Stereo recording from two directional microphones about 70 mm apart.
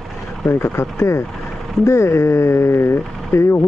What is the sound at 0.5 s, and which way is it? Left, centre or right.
Speech, left.